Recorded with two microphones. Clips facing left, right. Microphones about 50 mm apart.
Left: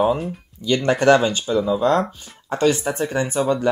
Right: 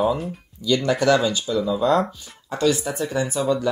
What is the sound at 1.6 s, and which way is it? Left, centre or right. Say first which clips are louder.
Speech: left 3 dB; left.